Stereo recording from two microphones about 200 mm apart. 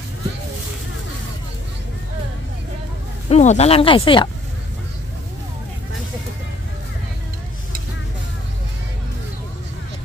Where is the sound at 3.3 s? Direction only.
35° left (ahead or behind).